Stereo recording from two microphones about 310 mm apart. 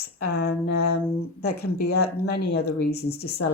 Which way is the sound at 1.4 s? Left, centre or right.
Left.